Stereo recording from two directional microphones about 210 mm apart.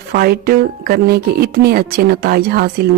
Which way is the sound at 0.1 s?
45° right (ahead or behind).